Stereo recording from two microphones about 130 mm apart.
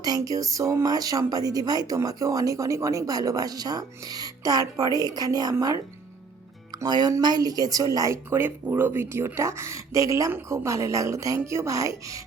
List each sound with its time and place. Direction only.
0.0 s speech: 30° right (ahead or behind)